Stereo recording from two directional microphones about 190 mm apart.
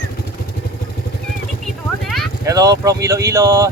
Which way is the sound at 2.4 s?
20° right (ahead or behind).